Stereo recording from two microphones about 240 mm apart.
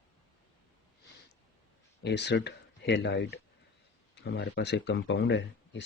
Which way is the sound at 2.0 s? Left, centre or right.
Left.